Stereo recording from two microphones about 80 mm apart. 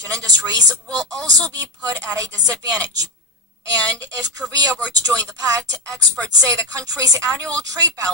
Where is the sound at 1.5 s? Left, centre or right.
Right.